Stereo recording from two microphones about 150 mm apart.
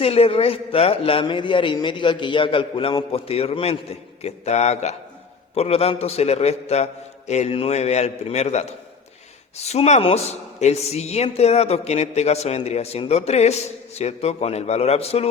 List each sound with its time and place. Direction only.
0.0 s a man's voice: 40° left (ahead or behind)